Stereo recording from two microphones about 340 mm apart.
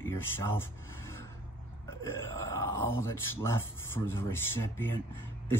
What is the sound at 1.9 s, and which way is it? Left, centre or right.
Speech, centre.